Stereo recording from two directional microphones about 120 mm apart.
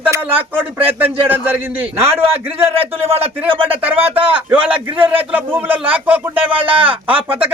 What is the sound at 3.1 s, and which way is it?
Speech, 55° right (ahead or behind).